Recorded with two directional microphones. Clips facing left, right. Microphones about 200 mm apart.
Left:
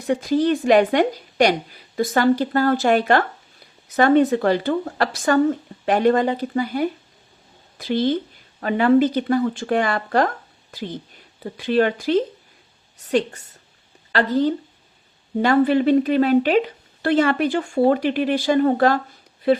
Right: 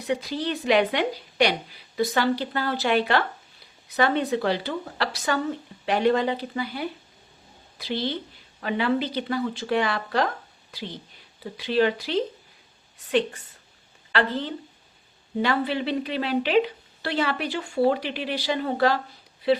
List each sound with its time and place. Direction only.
0.1 s a woman's voice: 45° left (ahead or behind)